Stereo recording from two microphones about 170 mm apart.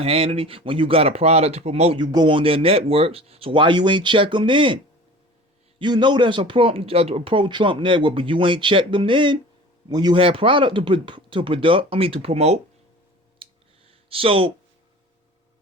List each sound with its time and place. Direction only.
0.0 s speech: 35° right (ahead or behind)
5.8 s speech: 25° right (ahead or behind)
13.4 s clicking: 30° right (ahead or behind)
14.1 s speech: 35° right (ahead or behind)